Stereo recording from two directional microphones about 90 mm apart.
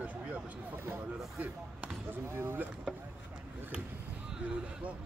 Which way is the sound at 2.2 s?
25° right (ahead or behind).